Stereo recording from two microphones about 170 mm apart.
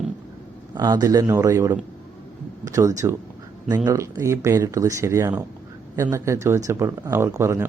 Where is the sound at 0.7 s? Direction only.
20° right (ahead or behind).